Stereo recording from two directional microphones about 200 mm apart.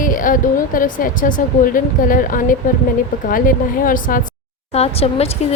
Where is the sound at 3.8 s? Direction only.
45° left (ahead or behind).